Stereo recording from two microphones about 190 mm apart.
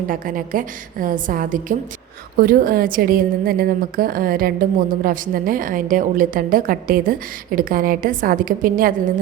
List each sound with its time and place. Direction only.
0.1 s a woman's voice: 45° right (ahead or behind)